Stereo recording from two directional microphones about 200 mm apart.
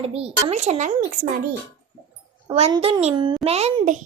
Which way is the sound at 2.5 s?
25° right (ahead or behind).